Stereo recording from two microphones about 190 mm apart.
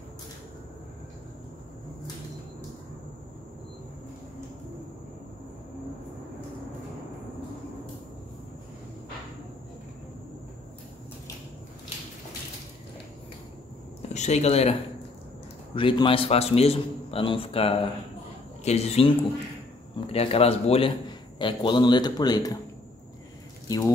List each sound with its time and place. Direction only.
14.0 s a man's voice: 35° left (ahead or behind); by 22.6 s 20° left (ahead or behind)